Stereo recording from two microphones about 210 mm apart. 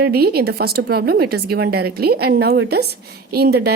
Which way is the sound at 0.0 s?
50° right (ahead or behind).